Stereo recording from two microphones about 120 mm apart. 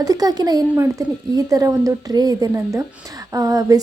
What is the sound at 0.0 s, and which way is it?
A woman's voice, 30° right (ahead or behind).